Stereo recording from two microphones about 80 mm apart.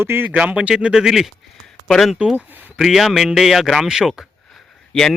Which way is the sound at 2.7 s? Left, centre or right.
Centre.